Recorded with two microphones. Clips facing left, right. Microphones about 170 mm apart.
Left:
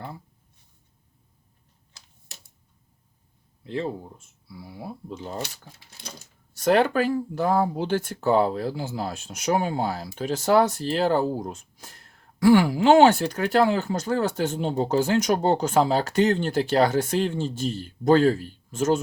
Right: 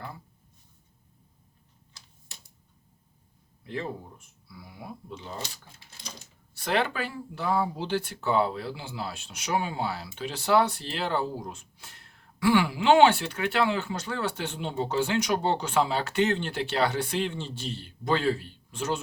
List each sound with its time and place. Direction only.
3.6 s speech: 30° left (ahead or behind)
5.1 s speech: 45° left (ahead or behind)
6.5 s speech: 45° left (ahead or behind)